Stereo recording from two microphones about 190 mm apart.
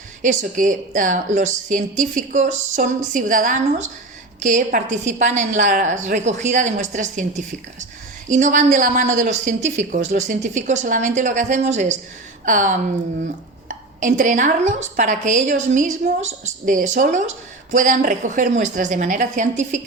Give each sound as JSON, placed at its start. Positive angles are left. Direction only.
{"t": 0.2, "sound": "a woman's voice", "side_deg": -45}